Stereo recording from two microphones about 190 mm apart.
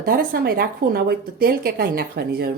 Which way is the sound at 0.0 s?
50° right (ahead or behind).